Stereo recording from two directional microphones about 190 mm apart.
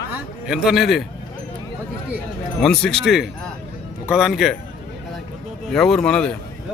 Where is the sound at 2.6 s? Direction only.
5° left (ahead or behind).